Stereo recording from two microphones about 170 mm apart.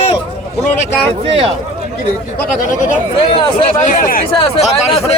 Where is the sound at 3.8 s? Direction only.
50° left (ahead or behind).